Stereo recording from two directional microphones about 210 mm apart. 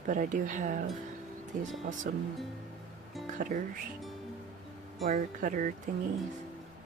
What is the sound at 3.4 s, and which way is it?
Speech, 40° right (ahead or behind).